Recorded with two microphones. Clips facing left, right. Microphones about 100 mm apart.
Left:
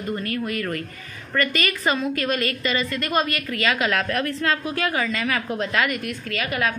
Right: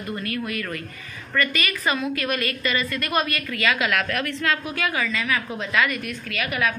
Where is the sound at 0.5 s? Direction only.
35° left (ahead or behind).